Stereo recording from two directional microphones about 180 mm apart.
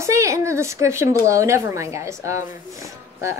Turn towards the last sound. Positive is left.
turn(degrees=-15)  # may be behind; listen again after turning